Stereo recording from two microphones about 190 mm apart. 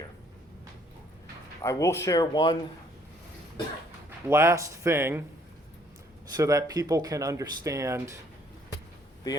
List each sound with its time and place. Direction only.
1.6 s speech: 15° left (ahead or behind)
4.3 s speech: 15° right (ahead or behind)
6.3 s speech: 20° right (ahead or behind)